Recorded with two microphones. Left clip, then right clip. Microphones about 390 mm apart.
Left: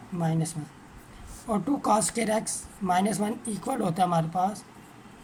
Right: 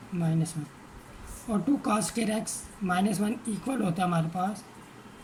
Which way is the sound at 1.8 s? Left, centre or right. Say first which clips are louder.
Left 4 dB; centre.